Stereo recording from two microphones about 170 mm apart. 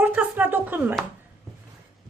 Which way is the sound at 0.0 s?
10° right (ahead or behind).